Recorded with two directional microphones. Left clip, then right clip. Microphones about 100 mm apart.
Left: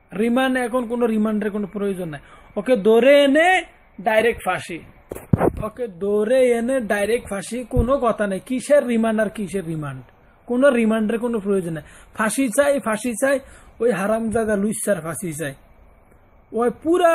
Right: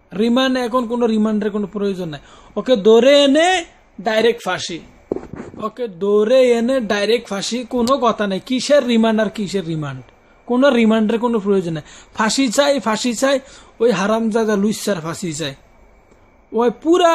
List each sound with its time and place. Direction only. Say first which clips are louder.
0.1 s a man's voice: right 3 dB; 10° right (ahead or behind)
16.5 s a man's voice: right 4 dB; 15° right (ahead or behind)